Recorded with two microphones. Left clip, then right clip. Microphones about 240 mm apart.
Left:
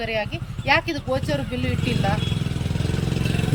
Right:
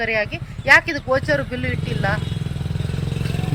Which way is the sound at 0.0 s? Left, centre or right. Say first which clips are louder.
Right 5 dB; centre.